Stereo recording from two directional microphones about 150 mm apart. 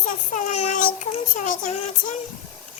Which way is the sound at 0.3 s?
50° left (ahead or behind).